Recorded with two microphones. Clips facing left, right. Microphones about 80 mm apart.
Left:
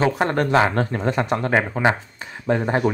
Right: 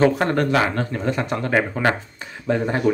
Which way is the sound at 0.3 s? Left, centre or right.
Left.